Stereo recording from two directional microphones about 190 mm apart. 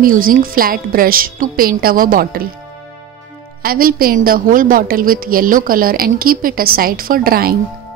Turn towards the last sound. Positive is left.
turn(degrees=-50)  # may be behind; listen again after turning